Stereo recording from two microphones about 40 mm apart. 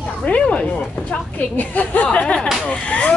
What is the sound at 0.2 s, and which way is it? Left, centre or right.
Speech, left.